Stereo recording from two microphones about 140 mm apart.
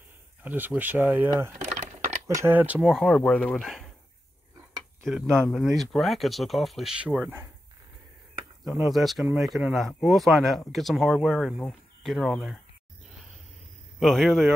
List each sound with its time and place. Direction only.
0.4 s speech: 10° right (ahead or behind)
1.7 s a sound: 55° right (ahead or behind)
2.2 s speech: 20° right (ahead or behind)
2.9 s speech: centre (ahead or behind)
5.0 s speech: 5° left (ahead or behind)
8.8 s speech: centre (ahead or behind)
13.9 s speech: centre (ahead or behind)